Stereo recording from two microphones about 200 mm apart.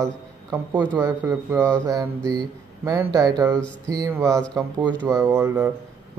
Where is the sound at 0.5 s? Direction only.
10° right (ahead or behind).